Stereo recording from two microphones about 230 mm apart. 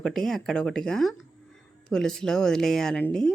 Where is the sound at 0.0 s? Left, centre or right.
Centre.